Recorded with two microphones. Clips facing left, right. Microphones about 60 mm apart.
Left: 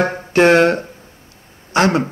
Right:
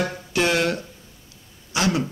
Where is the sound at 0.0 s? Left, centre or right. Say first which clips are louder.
Left 9 dB; left.